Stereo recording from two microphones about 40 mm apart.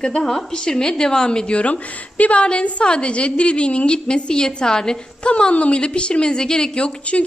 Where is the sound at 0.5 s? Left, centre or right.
Centre.